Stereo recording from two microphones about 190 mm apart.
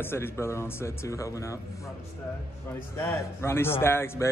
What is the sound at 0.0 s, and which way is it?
Speech, 10° left (ahead or behind).